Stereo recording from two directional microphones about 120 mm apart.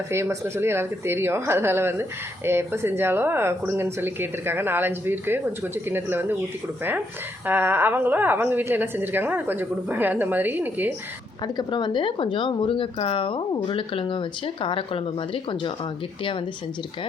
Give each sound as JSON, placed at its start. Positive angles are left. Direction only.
{"t": 0.1, "sound": "speech", "side_deg": -20}
{"t": 7.4, "sound": "a woman's voice", "side_deg": -15}
{"t": 11.4, "sound": "a woman's voice", "side_deg": 35}